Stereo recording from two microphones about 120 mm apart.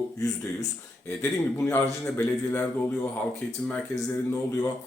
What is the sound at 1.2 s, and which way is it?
Speech, 20° left (ahead or behind).